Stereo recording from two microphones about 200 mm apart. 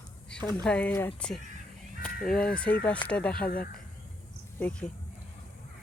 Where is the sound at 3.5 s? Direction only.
45° left (ahead or behind).